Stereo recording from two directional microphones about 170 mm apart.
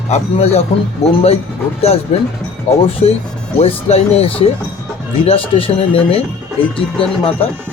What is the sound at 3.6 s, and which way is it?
Speech, 35° left (ahead or behind).